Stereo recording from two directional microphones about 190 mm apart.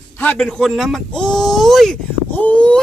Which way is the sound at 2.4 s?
5° left (ahead or behind).